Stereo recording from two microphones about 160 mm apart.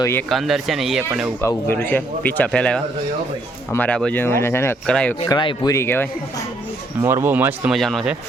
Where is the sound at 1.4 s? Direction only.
15° left (ahead or behind).